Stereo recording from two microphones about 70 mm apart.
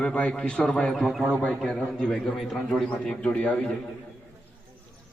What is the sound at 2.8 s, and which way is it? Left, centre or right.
Speech, centre.